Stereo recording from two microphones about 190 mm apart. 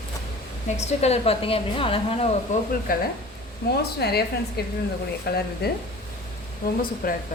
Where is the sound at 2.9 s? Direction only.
50° left (ahead or behind).